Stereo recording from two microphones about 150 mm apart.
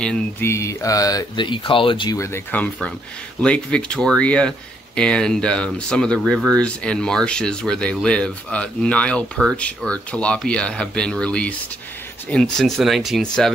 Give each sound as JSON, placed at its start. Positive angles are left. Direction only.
{"t": 0.0, "sound": "speech", "side_deg": 5}
{"t": 0.5, "sound": "speech", "side_deg": 20}
{"t": 2.1, "sound": "speech", "side_deg": 20}